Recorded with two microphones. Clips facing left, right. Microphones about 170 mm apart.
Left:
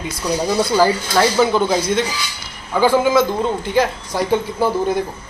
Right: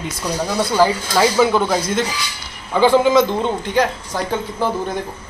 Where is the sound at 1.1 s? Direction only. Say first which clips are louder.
Right 1 dB; centre (ahead or behind).